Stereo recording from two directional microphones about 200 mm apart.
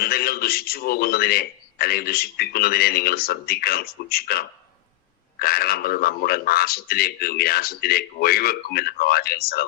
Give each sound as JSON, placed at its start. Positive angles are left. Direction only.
{"t": 0.0, "sound": "a man's voice", "side_deg": 50}